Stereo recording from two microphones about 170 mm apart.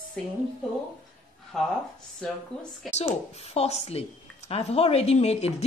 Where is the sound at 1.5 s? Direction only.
Centre (ahead or behind).